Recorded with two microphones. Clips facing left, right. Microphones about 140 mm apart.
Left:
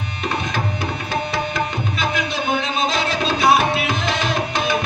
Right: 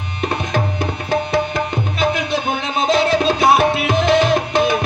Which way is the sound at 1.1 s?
55° right (ahead or behind).